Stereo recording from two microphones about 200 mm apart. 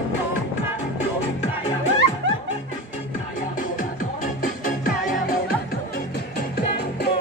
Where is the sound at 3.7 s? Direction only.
45° left (ahead or behind).